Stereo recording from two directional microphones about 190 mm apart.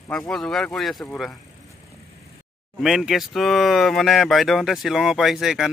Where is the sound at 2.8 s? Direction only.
Centre (ahead or behind).